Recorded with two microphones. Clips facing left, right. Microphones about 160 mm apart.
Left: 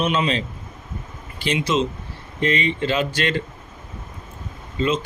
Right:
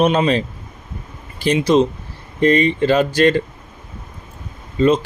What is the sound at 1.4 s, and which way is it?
Speech, 40° right (ahead or behind).